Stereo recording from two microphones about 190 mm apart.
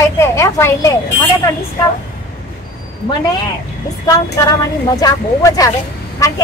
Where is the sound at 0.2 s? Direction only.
15° left (ahead or behind).